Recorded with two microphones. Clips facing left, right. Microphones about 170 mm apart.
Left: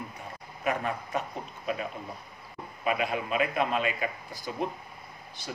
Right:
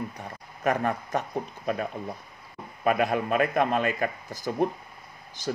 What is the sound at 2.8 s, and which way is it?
Speech, 50° right (ahead or behind).